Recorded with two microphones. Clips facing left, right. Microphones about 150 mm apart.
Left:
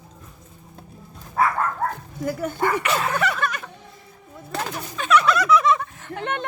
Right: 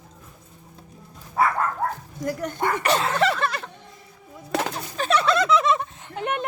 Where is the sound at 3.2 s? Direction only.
30° right (ahead or behind).